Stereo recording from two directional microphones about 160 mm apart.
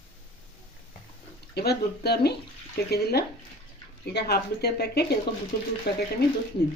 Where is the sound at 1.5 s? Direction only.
85° left.